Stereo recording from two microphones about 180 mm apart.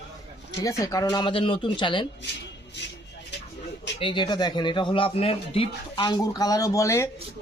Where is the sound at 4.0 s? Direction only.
25° left (ahead or behind).